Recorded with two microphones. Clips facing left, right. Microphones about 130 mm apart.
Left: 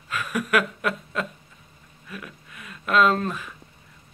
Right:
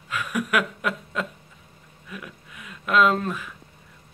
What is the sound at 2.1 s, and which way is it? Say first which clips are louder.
A man's voice: even; 10° right (ahead or behind).